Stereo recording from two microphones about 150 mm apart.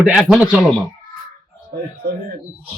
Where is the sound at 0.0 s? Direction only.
5° right (ahead or behind).